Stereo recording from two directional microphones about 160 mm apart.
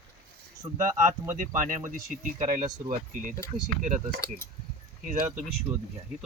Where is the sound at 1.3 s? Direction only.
50° right (ahead or behind).